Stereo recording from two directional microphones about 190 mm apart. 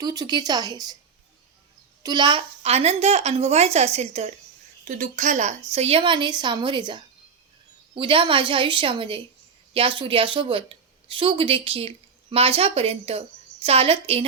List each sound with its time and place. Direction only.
0.0 s a woman's voice: 20° right (ahead or behind)
2.0 s a woman's voice: 25° right (ahead or behind)